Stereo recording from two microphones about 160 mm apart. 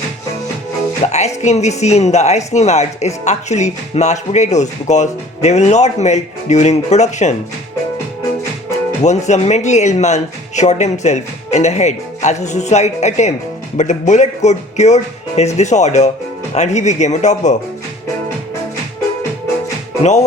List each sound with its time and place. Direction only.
1.0 s speech: 45° left (ahead or behind)
9.0 s speech: 45° left (ahead or behind)
20.0 s speech: 45° left (ahead or behind)